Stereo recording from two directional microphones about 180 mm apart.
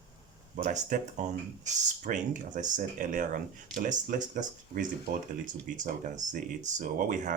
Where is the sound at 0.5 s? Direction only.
45° right (ahead or behind).